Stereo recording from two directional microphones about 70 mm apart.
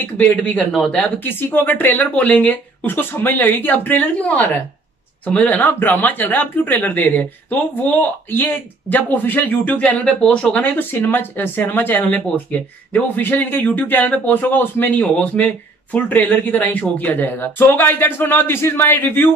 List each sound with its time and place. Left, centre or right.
0.0 s speech: left
1.2 s speech: left; by 10.6 s centre
10.6 s speech: left